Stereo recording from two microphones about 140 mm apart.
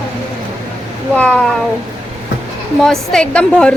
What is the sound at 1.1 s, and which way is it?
Speech, 10° left (ahead or behind).